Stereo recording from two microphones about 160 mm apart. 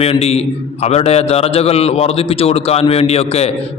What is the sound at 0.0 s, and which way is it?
A man's voice, 40° left (ahead or behind).